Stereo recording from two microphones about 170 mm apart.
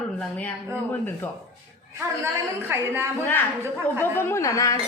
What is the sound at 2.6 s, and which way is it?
Speech, 15° right (ahead or behind).